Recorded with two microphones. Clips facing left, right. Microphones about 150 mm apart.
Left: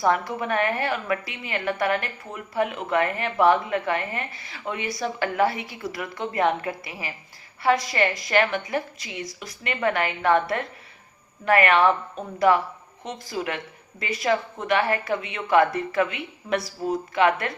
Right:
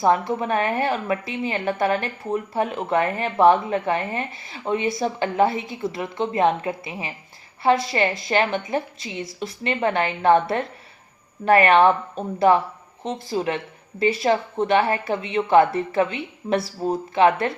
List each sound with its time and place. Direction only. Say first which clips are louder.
0.0 s a woman's voice: right 3 dB; 25° right (ahead or behind)